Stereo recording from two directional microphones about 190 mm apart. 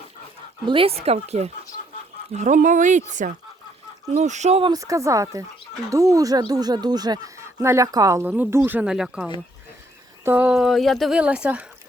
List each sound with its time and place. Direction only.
0.7 s speech: 30° right (ahead or behind)
4.7 s speech: 15° right (ahead or behind)